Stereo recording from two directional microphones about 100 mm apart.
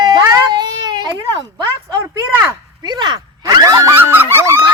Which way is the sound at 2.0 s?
25° right (ahead or behind).